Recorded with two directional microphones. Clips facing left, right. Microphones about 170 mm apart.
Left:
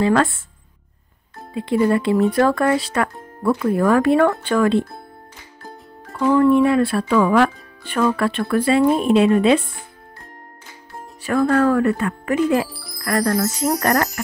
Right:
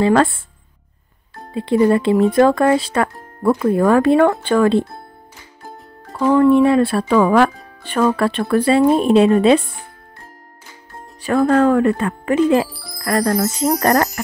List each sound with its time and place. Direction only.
0.0 s speech: 30° right (ahead or behind)
1.5 s speech: 30° right (ahead or behind)
6.0 s music: 30° right (ahead or behind)
6.5 s speech: 25° right (ahead or behind)
11.2 s speech: 25° right (ahead or behind)
12.6 s music: centre (ahead or behind)
13.0 s speech: 25° right (ahead or behind)